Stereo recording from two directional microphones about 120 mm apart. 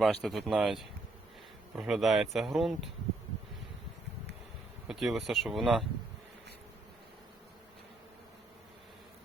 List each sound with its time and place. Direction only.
0.0 s speech: centre (ahead or behind)
4.9 s speech: centre (ahead or behind)